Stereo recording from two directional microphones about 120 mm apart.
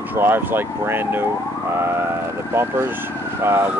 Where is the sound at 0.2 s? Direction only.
20° right (ahead or behind).